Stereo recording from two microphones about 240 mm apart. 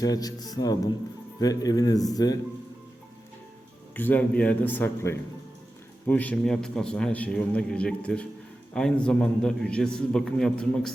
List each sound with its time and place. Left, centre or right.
0.0 s a man's voice: centre
3.9 s a man's voice: centre